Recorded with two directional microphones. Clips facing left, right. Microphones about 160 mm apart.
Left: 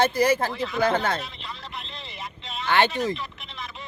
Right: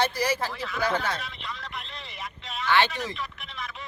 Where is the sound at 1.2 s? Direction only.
25° left (ahead or behind).